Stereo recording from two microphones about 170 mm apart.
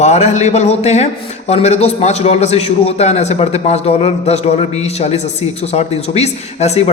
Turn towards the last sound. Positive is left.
turn(degrees=40)  # may be behind; listen again after turning